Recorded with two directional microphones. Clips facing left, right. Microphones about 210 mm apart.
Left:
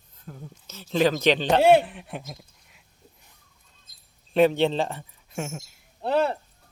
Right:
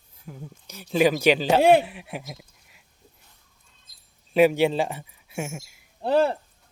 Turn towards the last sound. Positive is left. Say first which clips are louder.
# right 1 dB
turn(degrees=-5)  # may be behind; listen again after turning